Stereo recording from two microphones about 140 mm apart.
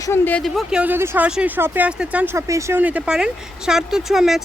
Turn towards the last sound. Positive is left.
turn(degrees=0)  # may be behind; listen again after turning